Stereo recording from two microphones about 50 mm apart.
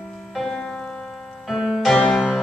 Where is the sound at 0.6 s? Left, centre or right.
Centre.